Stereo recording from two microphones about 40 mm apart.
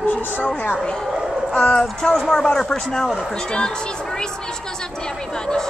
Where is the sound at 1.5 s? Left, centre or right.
Left.